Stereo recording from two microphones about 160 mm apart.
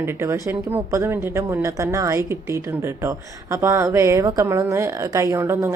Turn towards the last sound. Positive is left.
turn(degrees=-15)  # may be behind; listen again after turning